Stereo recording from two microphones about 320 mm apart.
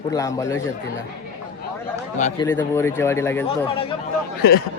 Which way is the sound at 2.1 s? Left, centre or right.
Left.